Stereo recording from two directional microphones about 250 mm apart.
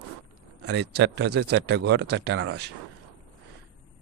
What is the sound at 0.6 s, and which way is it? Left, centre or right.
Speech, right.